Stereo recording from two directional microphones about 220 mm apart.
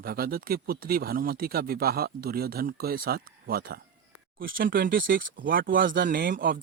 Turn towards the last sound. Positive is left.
turn(degrees=-40)  # may be behind; listen again after turning